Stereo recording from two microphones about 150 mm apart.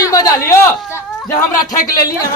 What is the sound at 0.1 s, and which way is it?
Speech, 25° left (ahead or behind).